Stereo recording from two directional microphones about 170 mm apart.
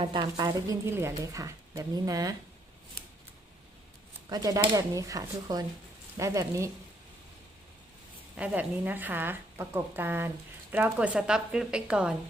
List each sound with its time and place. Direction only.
0.0 s a woman's voice: 25° right (ahead or behind)
4.3 s a woman's voice: 20° right (ahead or behind)
8.4 s a woman's voice: 10° right (ahead or behind)